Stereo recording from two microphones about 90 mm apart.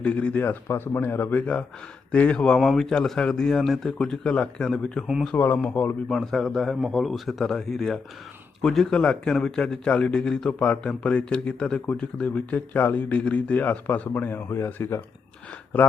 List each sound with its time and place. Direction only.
0.0 s speech: 15° left (ahead or behind)
2.6 s speech: centre (ahead or behind)
5.3 s speech: 20° left (ahead or behind)
6.1 s a man's voice: 5° left (ahead or behind); by 15.0 s 30° left (ahead or behind)